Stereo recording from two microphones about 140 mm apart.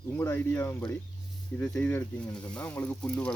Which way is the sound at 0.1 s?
15° left (ahead or behind).